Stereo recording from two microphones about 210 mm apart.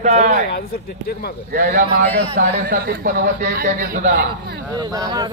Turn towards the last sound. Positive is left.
turn(degrees=-15)  # may be behind; listen again after turning